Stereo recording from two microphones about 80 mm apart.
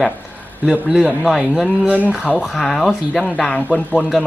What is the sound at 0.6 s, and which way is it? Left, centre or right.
A man's voice, centre.